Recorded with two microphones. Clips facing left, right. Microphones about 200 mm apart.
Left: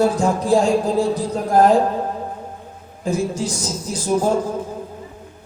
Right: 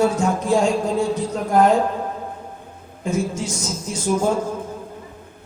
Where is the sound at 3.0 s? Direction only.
35° left (ahead or behind).